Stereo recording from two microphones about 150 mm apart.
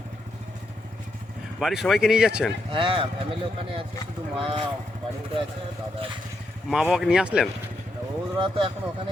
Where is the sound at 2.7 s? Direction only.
35° right (ahead or behind).